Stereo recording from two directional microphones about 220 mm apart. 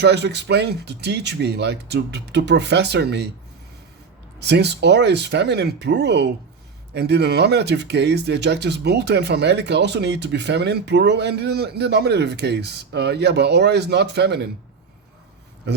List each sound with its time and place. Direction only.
0.0 s speech: 50° right (ahead or behind)
4.4 s speech: 50° right (ahead or behind)